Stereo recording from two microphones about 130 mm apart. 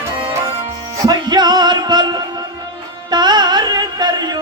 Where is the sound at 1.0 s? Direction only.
35° right (ahead or behind).